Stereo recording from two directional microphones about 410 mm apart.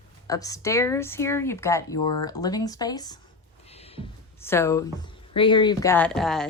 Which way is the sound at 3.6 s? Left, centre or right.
Centre.